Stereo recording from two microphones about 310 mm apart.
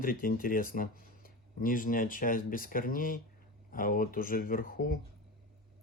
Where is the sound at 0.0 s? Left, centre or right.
Left.